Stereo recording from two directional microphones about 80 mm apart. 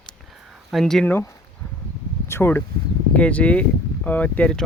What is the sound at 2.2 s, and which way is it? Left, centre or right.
Speech, left.